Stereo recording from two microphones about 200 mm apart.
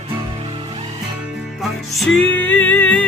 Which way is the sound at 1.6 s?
Centre (ahead or behind).